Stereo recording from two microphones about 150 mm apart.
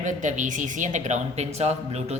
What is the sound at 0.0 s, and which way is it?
A woman's voice, 55° right (ahead or behind).